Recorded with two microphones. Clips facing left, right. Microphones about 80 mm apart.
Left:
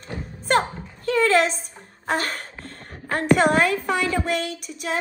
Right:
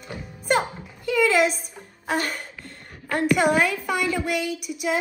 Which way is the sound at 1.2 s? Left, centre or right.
Centre.